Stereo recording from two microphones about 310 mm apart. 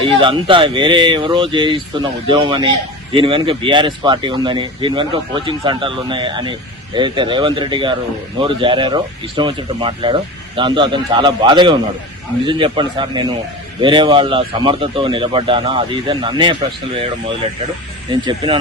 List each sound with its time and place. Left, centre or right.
0.0 s speech: centre
18.1 s speech: centre